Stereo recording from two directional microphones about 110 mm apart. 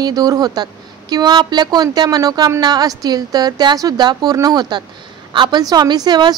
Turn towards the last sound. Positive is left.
turn(degrees=-40)  # may be behind; listen again after turning